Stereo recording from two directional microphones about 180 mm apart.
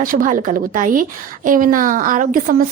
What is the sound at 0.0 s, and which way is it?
A woman's voice, 50° right (ahead or behind).